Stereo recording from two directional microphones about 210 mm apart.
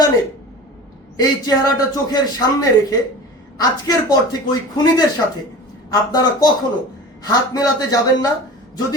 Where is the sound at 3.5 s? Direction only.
20° left (ahead or behind).